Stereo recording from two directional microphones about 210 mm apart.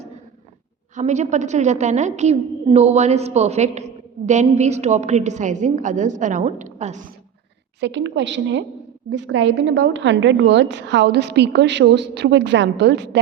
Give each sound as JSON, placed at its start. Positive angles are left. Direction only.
{"t": 0.9, "sound": "a woman's voice", "side_deg": -35}
{"t": 7.8, "sound": "a woman's voice", "side_deg": -60}